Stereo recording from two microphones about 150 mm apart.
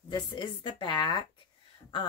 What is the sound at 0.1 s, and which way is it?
Speech, 30° left (ahead or behind).